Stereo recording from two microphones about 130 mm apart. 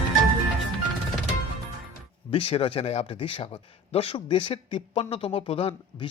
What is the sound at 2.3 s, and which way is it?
Speech, 45° left (ahead or behind).